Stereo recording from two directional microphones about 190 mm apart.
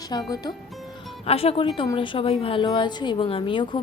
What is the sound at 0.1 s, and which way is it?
Speech, 20° left (ahead or behind).